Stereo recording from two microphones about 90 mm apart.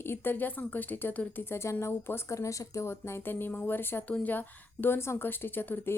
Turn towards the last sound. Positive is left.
turn(degrees=20)  # may be behind; listen again after turning